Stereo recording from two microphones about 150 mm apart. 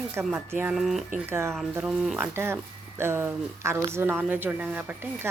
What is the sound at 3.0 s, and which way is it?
Speech, 15° right (ahead or behind).